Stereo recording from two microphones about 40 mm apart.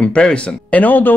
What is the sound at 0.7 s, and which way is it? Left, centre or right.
Speech, left.